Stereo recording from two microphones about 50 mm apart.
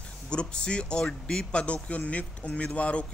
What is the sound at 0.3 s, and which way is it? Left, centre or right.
A man's voice, centre.